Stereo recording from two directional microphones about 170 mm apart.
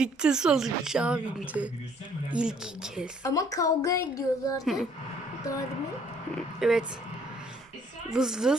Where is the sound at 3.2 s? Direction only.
20° left (ahead or behind).